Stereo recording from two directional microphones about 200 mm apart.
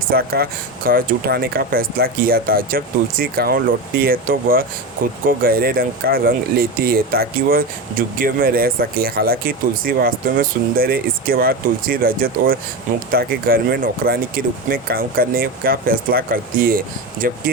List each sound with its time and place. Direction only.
0.1 s speech: 50° right (ahead or behind)